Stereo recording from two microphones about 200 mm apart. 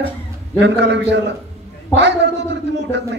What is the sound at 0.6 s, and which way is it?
A man's voice, 60° right (ahead or behind).